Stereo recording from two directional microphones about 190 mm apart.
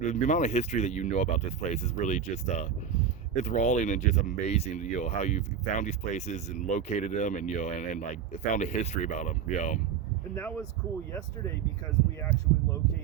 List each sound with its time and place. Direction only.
0.0 s speech: 40° left (ahead or behind)
12.2 s speech: 15° left (ahead or behind)